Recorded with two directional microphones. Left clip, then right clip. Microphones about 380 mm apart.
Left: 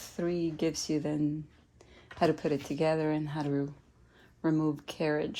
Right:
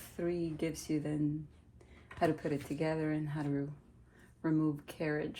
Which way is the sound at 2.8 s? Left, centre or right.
Left.